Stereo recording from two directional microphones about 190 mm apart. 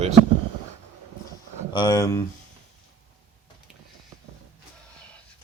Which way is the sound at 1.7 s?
20° left (ahead or behind).